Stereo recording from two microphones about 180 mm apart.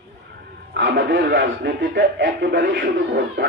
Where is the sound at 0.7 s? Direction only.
75° right (ahead or behind).